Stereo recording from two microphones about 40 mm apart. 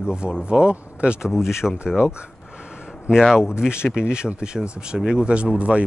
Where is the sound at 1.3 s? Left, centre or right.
Centre.